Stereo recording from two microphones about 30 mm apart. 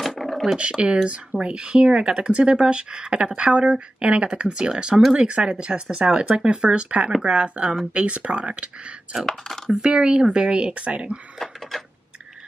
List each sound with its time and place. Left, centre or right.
0.2 s dog: centre
0.6 s speech: right
8.5 s speech: right
9.2 s speech: centre
9.8 s speech: right